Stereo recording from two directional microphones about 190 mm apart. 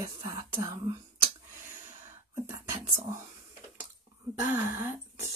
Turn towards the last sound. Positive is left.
turn(degrees=-10)  # may be behind; listen again after turning